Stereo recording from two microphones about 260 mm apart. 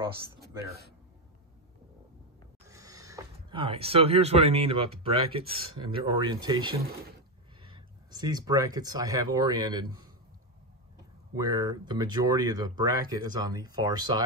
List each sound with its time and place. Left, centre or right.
2.7 s speech: centre
11.3 s speech: centre